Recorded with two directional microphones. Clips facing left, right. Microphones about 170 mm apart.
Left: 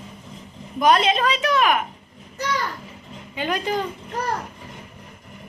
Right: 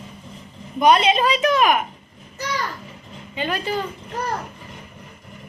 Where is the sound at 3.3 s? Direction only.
15° left (ahead or behind).